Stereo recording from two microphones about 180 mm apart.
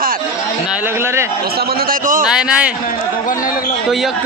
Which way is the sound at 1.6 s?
50° right (ahead or behind).